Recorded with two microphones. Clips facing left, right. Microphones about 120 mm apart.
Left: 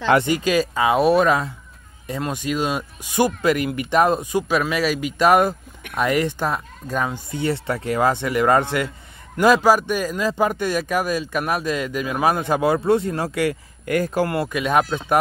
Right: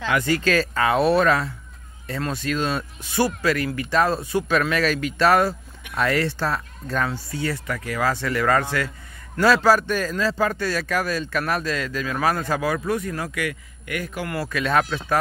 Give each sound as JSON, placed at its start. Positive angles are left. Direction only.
{"t": 0.2, "sound": "a man's voice", "side_deg": 15}
{"t": 14.3, "sound": "a man's voice", "side_deg": 20}